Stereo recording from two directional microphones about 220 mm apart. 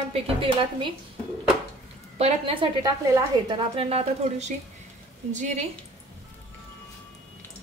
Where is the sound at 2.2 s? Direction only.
30° right (ahead or behind).